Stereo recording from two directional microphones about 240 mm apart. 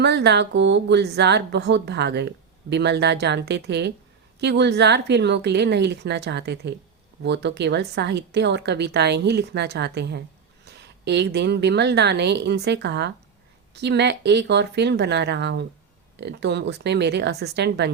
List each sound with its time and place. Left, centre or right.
0.0 s speech: right